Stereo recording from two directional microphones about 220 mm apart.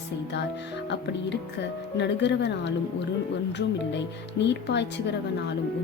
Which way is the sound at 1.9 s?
50° left (ahead or behind).